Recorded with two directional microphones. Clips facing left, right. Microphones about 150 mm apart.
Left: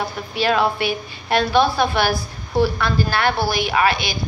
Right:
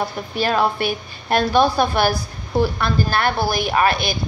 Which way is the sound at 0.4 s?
45° right (ahead or behind).